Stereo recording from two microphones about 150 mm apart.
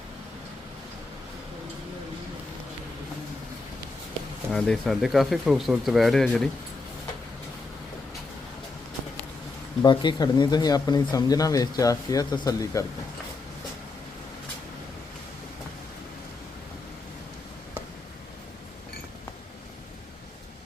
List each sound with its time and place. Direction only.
4.5 s speech: 5° left (ahead or behind)
9.8 s speech: 30° left (ahead or behind)